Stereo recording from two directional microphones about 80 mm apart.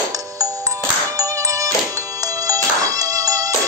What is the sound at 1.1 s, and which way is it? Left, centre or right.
Music, right.